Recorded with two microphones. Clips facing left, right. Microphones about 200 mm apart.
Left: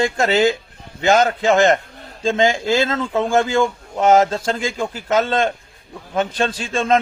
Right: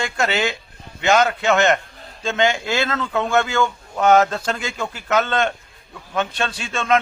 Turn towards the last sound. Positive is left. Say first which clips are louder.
# left 2 dB
turn(degrees=35)  # may be behind; listen again after turning